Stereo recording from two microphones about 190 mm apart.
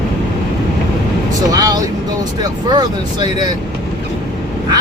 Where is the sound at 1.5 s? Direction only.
20° right (ahead or behind).